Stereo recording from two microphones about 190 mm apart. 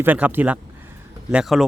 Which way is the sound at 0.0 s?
10° right (ahead or behind).